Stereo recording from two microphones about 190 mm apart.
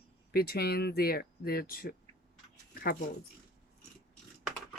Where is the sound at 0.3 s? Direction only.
55° left (ahead or behind).